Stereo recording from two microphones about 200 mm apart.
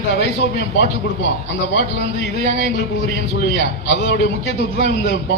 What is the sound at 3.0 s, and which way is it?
A man's voice, 55° left (ahead or behind).